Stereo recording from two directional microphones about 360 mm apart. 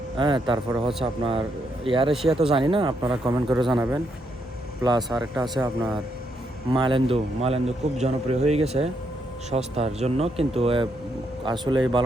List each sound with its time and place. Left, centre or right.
0.2 s a man's voice: centre
0.9 s speech: centre
1.2 s a man's voice: centre
2.1 s speech: centre
2.5 s a man's voice: centre
4.8 s a man's voice: centre